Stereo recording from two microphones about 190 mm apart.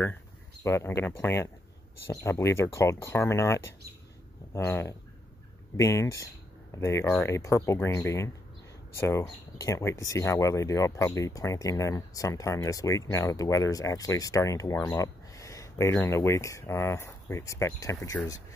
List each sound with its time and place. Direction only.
0.7 s speech: 15° left (ahead or behind)
9.6 s speech: 15° left (ahead or behind)